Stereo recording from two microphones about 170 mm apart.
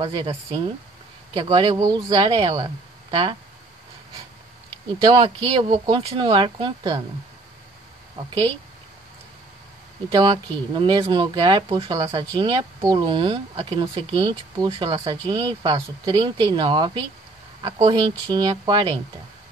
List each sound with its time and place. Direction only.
0.0 s speech: 30° right (ahead or behind)
5.0 s speech: 25° right (ahead or behind)
10.0 s speech: 25° right (ahead or behind)